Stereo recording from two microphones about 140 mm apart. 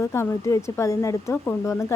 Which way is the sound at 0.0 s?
20° left (ahead or behind).